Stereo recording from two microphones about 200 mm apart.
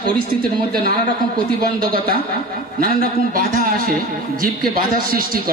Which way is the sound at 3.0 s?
45° right (ahead or behind).